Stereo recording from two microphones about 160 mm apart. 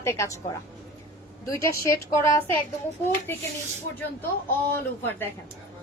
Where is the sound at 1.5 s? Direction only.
15° left (ahead or behind).